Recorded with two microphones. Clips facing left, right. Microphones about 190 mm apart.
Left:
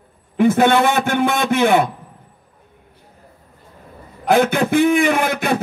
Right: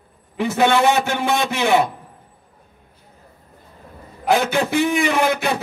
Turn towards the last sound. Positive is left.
turn(degrees=55)  # may be behind; listen again after turning